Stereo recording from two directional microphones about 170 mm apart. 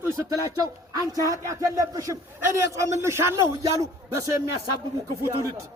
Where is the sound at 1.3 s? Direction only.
20° right (ahead or behind).